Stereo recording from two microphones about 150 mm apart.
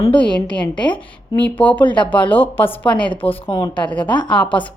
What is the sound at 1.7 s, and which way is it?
Speech, 30° left (ahead or behind).